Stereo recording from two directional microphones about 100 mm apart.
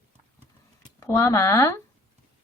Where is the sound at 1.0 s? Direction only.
30° left (ahead or behind).